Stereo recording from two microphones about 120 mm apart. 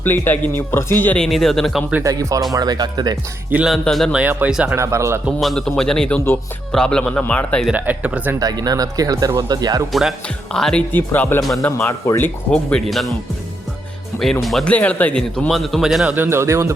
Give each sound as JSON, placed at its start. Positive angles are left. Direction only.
{"t": 0.0, "sound": "speech", "side_deg": 15}
{"t": 2.0, "sound": "speech", "side_deg": -30}
{"t": 3.7, "sound": "a man's voice", "side_deg": 0}
{"t": 4.1, "sound": "speech", "side_deg": -15}
{"t": 5.4, "sound": "a man's voice", "side_deg": 0}
{"t": 7.7, "sound": "speech", "side_deg": -10}
{"t": 8.4, "sound": "speech", "side_deg": -30}
{"t": 9.9, "sound": "a man's voice", "side_deg": 0}
{"t": 10.9, "sound": "speech", "side_deg": 15}
{"t": 12.7, "sound": "a man's voice", "side_deg": 0}
{"t": 14.4, "sound": "a man's voice", "side_deg": 5}
{"t": 16.1, "sound": "speech", "side_deg": -20}